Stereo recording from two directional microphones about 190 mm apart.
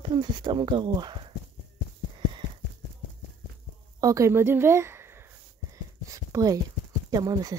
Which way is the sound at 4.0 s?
15° right (ahead or behind).